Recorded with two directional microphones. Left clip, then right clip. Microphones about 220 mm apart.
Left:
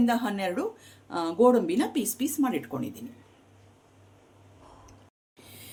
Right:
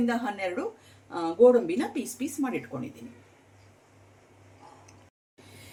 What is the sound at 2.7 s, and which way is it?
Speech, 50° left (ahead or behind).